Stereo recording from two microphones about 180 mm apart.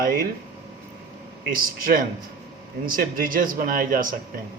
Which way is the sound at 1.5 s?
55° right (ahead or behind).